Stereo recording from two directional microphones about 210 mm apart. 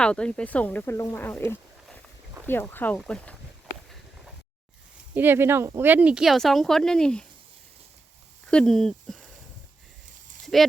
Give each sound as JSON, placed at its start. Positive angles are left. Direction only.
{"t": 0.0, "sound": "speech", "side_deg": 5}
{"t": 5.1, "sound": "speech", "side_deg": -10}
{"t": 8.4, "sound": "speech", "side_deg": 5}
{"t": 10.4, "sound": "horse", "side_deg": 0}